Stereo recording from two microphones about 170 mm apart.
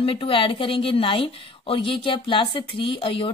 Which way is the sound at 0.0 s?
30° left (ahead or behind).